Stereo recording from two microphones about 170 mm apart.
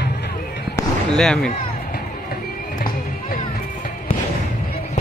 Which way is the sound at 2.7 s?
55° left (ahead or behind).